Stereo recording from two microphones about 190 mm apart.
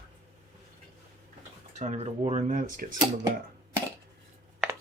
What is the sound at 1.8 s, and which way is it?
Speech, 35° right (ahead or behind).